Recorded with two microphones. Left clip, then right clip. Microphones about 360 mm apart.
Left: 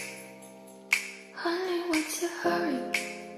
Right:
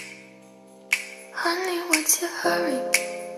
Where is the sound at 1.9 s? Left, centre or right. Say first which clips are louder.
Right 6 dB; right.